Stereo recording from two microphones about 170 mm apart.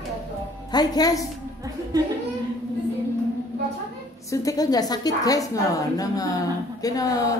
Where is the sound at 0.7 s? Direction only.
25° left (ahead or behind).